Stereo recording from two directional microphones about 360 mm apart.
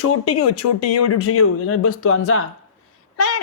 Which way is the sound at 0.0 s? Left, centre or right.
Left.